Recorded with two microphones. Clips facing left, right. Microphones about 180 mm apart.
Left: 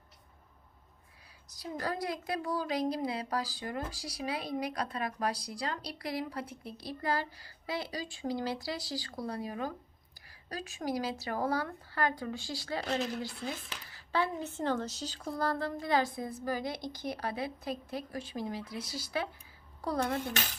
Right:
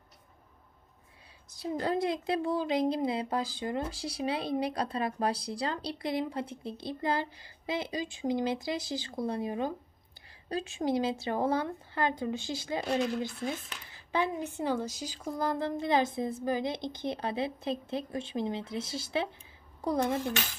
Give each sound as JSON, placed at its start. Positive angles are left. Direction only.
{"t": 1.5, "sound": "a woman's voice", "side_deg": -25}